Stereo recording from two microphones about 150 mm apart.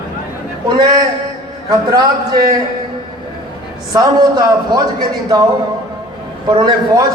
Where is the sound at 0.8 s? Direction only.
25° right (ahead or behind).